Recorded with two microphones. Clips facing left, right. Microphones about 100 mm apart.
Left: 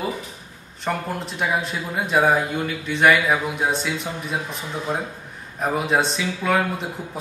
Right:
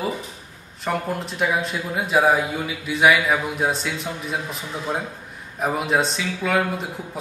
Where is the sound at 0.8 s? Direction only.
Centre (ahead or behind).